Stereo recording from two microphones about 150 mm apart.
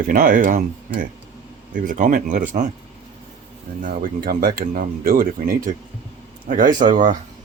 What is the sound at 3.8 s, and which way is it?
Speech, 65° right (ahead or behind).